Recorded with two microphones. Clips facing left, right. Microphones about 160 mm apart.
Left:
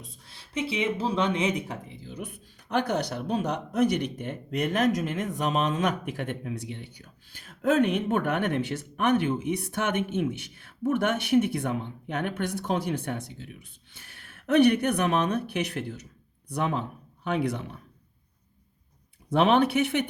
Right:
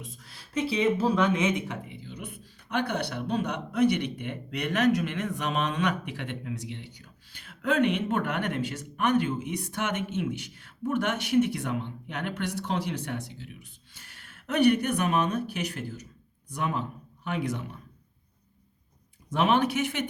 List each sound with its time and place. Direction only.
0.0 s speech: 25° left (ahead or behind); by 6.9 s 55° left (ahead or behind)
7.4 s speech: 40° left (ahead or behind)
9.1 s speech: 60° left (ahead or behind)
14.4 s speech: 60° left (ahead or behind)
19.3 s speech: 65° left (ahead or behind)